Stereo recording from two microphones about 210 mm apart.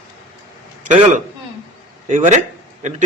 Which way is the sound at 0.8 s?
35° right (ahead or behind).